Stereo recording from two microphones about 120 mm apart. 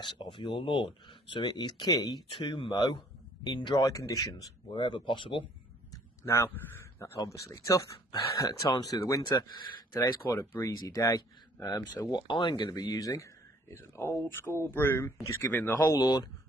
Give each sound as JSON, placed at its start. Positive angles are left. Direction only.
{"t": 0.0, "sound": "speech", "side_deg": 40}
{"t": 4.7, "sound": "speech", "side_deg": 45}
{"t": 5.9, "sound": "a sound", "side_deg": 25}
{"t": 7.2, "sound": "speech", "side_deg": 25}
{"t": 15.9, "sound": "speech", "side_deg": 35}